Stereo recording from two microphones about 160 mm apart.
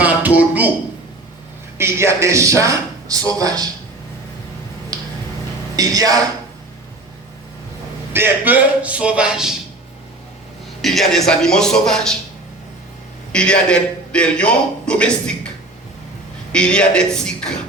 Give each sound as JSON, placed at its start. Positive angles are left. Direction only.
{"t": 0.0, "sound": "a sound", "side_deg": -10}
{"t": 1.8, "sound": "speech", "side_deg": -15}
{"t": 4.9, "sound": "tick-tock", "side_deg": -25}
{"t": 5.7, "sound": "speech", "side_deg": -20}
{"t": 8.1, "sound": "a man's voice", "side_deg": -10}
{"t": 10.8, "sound": "a man's voice", "side_deg": 0}
{"t": 13.3, "sound": "a man's voice", "side_deg": 5}